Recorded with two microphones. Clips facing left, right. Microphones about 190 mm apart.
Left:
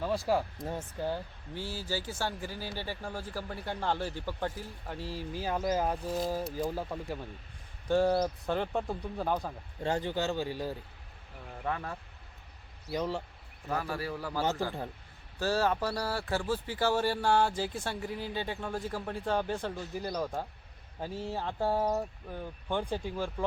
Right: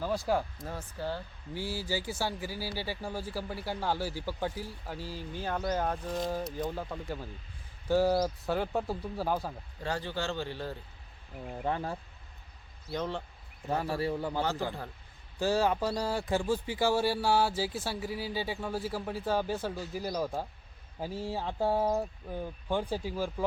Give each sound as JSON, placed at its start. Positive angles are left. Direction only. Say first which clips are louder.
{"t": 0.0, "sound": "speech", "louder": "left 1 dB", "side_deg": 0}
{"t": 0.6, "sound": "speech", "louder": "left 2 dB", "side_deg": 20}
{"t": 1.5, "sound": "speech", "louder": "right 2 dB", "side_deg": -10}
{"t": 9.8, "sound": "speech", "louder": "left 3 dB", "side_deg": 20}
{"t": 11.6, "sound": "a man's voice", "louder": "right 2 dB", "side_deg": -30}
{"t": 12.9, "sound": "speech", "louder": "left 1 dB", "side_deg": 5}
{"t": 13.7, "sound": "a man's voice", "louder": "right 3 dB", "side_deg": -25}